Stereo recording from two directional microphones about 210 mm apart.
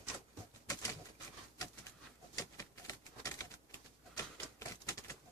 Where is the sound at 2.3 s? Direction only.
15° left (ahead or behind).